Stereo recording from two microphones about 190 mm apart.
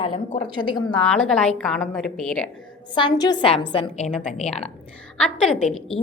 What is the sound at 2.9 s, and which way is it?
A woman's voice, 25° left (ahead or behind).